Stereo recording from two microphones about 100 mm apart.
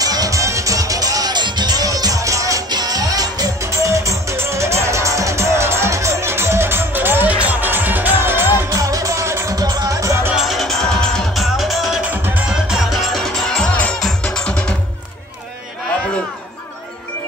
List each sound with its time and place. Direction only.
0.0 s music: 40° right (ahead or behind)
10.3 s music: centre (ahead or behind)
12.0 s music: 15° right (ahead or behind)
12.4 s music: 5° right (ahead or behind); by 14.8 s 10° left (ahead or behind)